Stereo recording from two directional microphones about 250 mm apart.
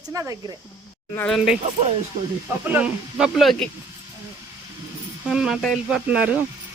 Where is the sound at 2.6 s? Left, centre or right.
Centre.